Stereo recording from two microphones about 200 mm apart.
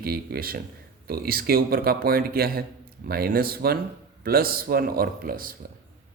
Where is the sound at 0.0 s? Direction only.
50° right (ahead or behind).